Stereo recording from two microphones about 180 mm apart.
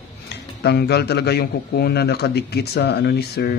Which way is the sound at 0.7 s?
65° left (ahead or behind).